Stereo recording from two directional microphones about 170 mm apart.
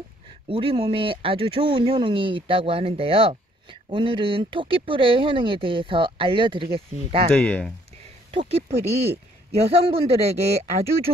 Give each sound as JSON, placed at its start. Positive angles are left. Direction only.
{"t": 0.5, "sound": "speech", "side_deg": -30}
{"t": 7.3, "sound": "speech", "side_deg": 5}
{"t": 8.3, "sound": "speech", "side_deg": -35}